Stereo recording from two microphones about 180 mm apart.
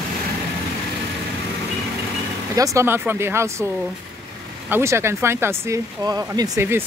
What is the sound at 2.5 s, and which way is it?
Speech, 20° right (ahead or behind).